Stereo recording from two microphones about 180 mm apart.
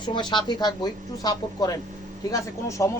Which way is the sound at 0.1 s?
25° left (ahead or behind).